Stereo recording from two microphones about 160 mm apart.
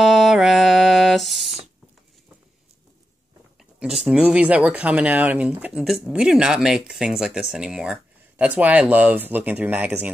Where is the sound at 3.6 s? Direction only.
Centre (ahead or behind).